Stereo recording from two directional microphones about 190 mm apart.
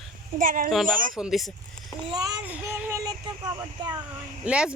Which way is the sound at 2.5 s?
15° right (ahead or behind).